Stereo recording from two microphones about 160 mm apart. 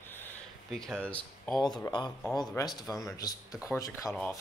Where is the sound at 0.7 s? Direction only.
Centre (ahead or behind).